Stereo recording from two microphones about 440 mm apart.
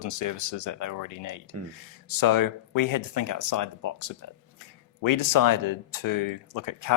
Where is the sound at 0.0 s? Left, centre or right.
Left.